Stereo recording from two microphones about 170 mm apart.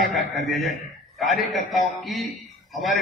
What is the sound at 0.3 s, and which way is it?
A man's voice, centre (ahead or behind).